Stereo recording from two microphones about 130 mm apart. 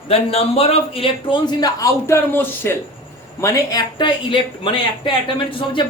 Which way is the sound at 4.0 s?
40° left (ahead or behind).